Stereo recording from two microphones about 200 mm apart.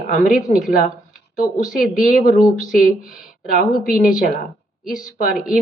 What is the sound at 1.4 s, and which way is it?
Speech, 45° left (ahead or behind).